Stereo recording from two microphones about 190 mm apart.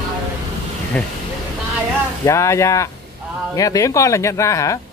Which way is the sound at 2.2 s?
15° left (ahead or behind).